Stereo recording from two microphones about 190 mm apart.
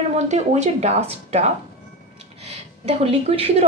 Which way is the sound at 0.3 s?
40° right (ahead or behind).